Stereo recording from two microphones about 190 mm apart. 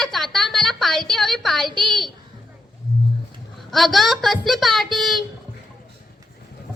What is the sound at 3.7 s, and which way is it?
A woman's voice, centre (ahead or behind).